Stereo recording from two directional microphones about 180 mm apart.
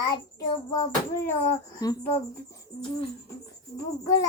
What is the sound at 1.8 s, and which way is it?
Child singing, 20° left (ahead or behind).